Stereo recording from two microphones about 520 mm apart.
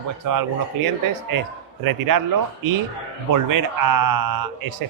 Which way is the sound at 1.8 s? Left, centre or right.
Right.